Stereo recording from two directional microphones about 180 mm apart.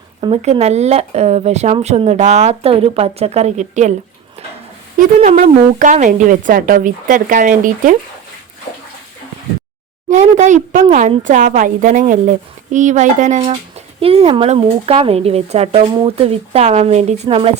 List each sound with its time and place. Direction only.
0.2 s speech: 30° right (ahead or behind)
4.9 s speech: 45° right (ahead or behind)
10.1 s speech: 40° right (ahead or behind)